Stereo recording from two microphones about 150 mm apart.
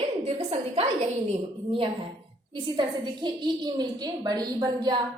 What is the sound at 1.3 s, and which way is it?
A woman's voice, 35° right (ahead or behind).